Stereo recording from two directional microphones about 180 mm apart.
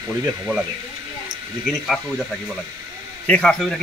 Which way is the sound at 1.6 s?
Centre (ahead or behind).